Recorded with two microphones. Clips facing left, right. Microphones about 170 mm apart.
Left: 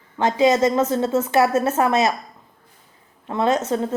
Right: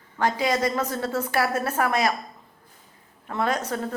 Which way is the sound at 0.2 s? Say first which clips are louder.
Left 7 dB; 25° left (ahead or behind).